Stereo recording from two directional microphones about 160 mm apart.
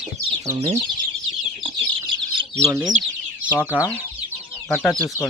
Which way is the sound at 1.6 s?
30° right (ahead or behind).